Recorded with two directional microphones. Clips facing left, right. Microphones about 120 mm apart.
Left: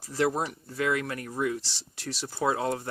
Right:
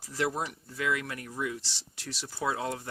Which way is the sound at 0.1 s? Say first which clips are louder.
Left 4 dB; 35° left (ahead or behind).